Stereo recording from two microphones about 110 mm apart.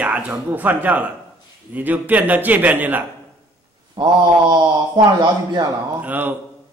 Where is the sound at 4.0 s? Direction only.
45° right (ahead or behind).